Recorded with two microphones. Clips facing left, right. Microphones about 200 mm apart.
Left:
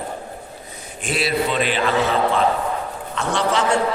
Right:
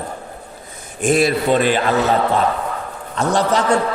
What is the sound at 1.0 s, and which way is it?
Speech, 45° right (ahead or behind).